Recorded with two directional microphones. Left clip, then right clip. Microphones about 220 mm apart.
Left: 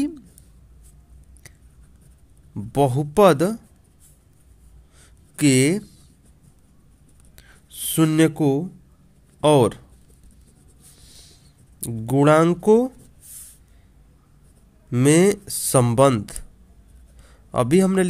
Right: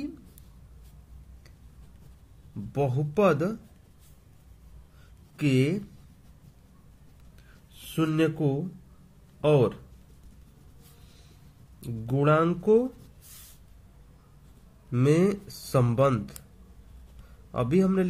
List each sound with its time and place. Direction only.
2.7 s speech: 45° left (ahead or behind)
5.4 s speech: 45° left (ahead or behind)
7.9 s speech: 45° left (ahead or behind)
11.8 s speech: 45° left (ahead or behind)
14.9 s speech: 45° left (ahead or behind)
17.5 s speech: 45° left (ahead or behind)